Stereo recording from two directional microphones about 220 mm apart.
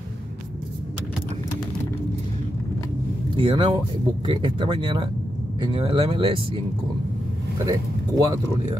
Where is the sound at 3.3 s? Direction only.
20° right (ahead or behind).